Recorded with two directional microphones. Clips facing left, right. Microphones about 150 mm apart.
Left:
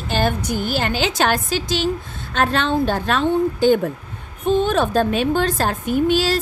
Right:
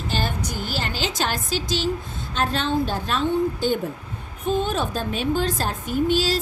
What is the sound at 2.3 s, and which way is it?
A woman's voice, 70° left (ahead or behind).